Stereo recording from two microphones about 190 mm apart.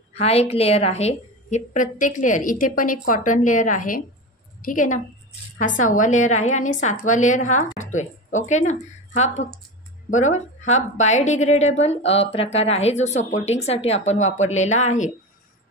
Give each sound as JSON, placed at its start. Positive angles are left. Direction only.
{"t": 0.1, "sound": "a woman's voice", "side_deg": 35}